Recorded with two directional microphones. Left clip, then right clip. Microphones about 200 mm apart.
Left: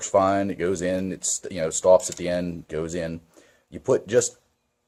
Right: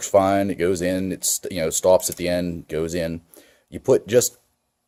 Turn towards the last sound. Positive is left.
turn(degrees=-45)  # may be behind; listen again after turning